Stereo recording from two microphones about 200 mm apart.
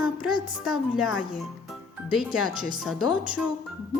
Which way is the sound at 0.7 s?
5° right (ahead or behind).